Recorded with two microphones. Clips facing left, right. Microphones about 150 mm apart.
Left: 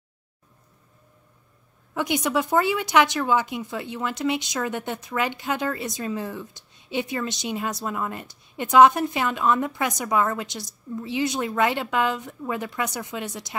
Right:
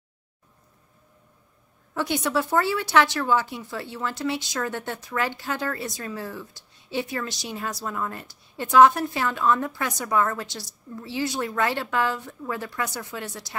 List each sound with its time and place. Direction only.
2.0 s speech: 15° left (ahead or behind)